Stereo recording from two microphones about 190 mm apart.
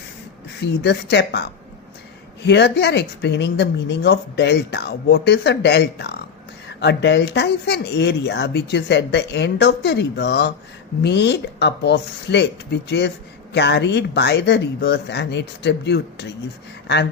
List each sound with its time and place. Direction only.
0.6 s speech: 60° left (ahead or behind)